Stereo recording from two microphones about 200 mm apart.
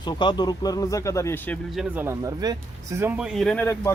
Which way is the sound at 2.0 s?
20° right (ahead or behind).